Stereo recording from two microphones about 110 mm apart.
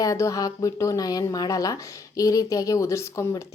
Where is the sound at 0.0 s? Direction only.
30° left (ahead or behind).